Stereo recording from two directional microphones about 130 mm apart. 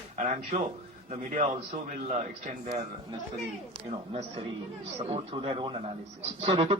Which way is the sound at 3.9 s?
55° right (ahead or behind).